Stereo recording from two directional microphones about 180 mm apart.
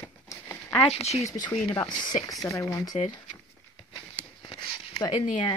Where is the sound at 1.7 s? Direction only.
20° left (ahead or behind).